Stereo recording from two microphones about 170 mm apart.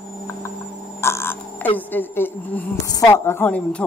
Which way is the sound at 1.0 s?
15° left (ahead or behind).